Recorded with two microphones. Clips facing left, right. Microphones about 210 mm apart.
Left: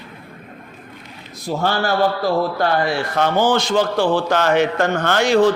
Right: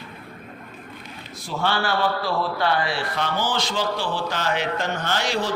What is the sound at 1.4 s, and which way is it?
A man's voice, 40° left (ahead or behind).